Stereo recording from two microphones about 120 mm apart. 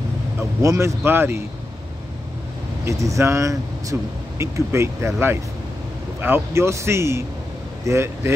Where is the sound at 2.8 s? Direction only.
25° right (ahead or behind).